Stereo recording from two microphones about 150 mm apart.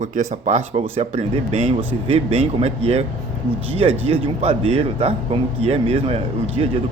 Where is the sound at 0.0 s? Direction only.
50° right (ahead or behind).